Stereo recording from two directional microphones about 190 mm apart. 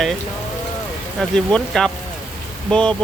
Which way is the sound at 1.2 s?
5° left (ahead or behind).